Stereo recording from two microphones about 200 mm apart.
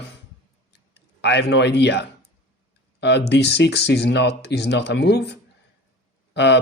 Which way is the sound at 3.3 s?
60° left (ahead or behind).